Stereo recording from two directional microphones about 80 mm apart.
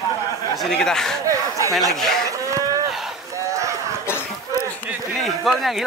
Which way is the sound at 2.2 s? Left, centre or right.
Right.